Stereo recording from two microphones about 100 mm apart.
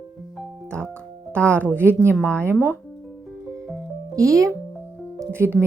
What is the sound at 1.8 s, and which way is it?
Speech, 15° left (ahead or behind).